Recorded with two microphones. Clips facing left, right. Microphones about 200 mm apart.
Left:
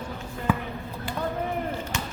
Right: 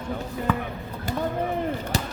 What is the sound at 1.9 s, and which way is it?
Basketball bounce, 35° right (ahead or behind).